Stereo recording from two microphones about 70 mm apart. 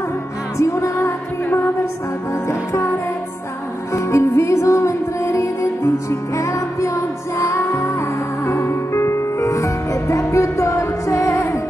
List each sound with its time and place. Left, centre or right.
0.6 s music: left
2.4 s music: left
3.9 s music: left